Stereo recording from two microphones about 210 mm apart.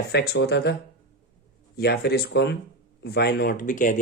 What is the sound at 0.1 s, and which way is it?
Speech, 50° left (ahead or behind).